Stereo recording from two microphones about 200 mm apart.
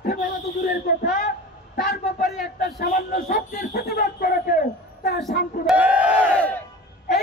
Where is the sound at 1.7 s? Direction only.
50° left (ahead or behind).